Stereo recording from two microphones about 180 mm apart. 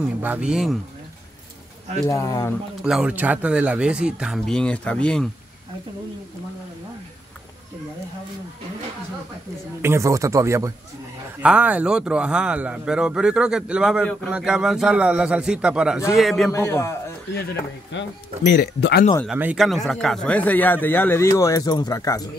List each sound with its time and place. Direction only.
0.2 s a man's voice: 5° right (ahead or behind)
2.0 s speech: 15° left (ahead or behind)
2.8 s a man's voice: 5° right (ahead or behind)
9.8 s a man's voice: 15° right (ahead or behind)
16.5 s speech: 15° left (ahead or behind)
17.3 s speech: 65° left (ahead or behind)
19.2 s speech: 5° right (ahead or behind); by 22.3 s 20° left (ahead or behind)